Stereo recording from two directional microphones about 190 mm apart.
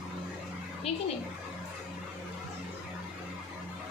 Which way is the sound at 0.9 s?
30° left (ahead or behind).